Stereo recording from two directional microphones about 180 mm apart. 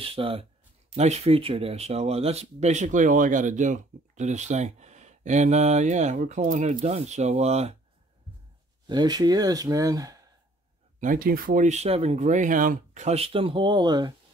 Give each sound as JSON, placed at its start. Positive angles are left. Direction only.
{"t": 0.0, "sound": "speech", "side_deg": -30}
{"t": 8.8, "sound": "speech", "side_deg": -25}
{"t": 11.0, "sound": "speech", "side_deg": -50}